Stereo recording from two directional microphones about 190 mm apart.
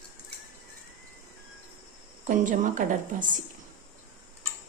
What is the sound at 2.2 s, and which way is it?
A woman's voice, 40° right (ahead or behind).